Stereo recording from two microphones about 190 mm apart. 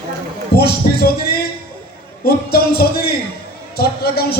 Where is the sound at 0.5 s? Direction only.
55° left (ahead or behind).